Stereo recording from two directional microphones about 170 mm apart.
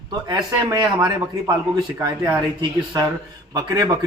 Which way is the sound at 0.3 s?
20° right (ahead or behind).